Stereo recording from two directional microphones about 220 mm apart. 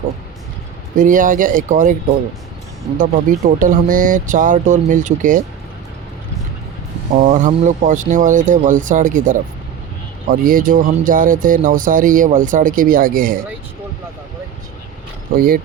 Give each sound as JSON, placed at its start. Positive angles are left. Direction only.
{"t": 0.9, "sound": "speech", "side_deg": -35}
{"t": 3.0, "sound": "speech", "side_deg": -35}
{"t": 7.1, "sound": "speech", "side_deg": -35}